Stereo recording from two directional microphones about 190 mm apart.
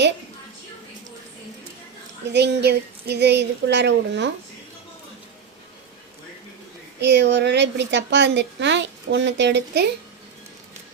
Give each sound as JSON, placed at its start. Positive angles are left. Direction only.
{"t": 2.2, "sound": "a woman's voice", "side_deg": -65}
{"t": 7.0, "sound": "a woman's voice", "side_deg": -65}